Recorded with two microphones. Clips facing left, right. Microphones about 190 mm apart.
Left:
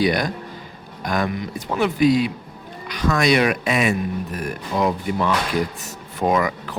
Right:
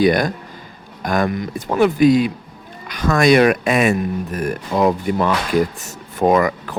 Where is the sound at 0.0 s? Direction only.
50° right (ahead or behind).